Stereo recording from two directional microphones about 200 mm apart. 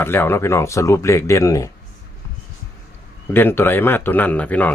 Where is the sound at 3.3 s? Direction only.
10° left (ahead or behind).